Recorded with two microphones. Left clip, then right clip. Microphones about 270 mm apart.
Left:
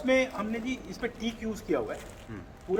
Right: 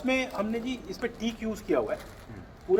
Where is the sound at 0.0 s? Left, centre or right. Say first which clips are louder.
Left 2 dB; right.